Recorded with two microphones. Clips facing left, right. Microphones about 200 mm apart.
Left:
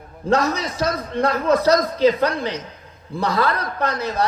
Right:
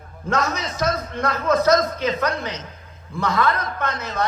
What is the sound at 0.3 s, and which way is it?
A man's voice, 35° left (ahead or behind).